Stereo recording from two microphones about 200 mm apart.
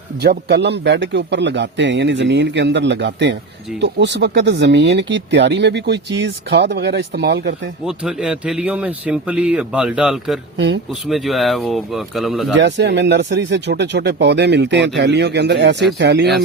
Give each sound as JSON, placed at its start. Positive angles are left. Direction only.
{"t": 0.2, "sound": "speech", "side_deg": -55}
{"t": 7.9, "sound": "speech", "side_deg": -5}
{"t": 12.5, "sound": "speech", "side_deg": -60}